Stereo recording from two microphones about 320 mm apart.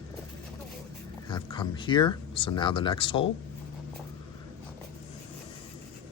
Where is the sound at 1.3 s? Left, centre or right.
Centre.